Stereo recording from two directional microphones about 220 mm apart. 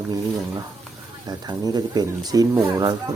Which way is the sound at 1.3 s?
20° right (ahead or behind).